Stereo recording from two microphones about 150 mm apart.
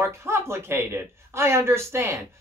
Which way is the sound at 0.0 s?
15° right (ahead or behind).